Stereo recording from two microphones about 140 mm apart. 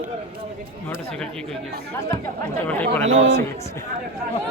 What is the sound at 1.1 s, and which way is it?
Speech, 5° left (ahead or behind).